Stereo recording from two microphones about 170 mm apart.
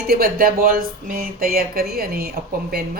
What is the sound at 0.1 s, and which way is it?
Speech, 60° right (ahead or behind).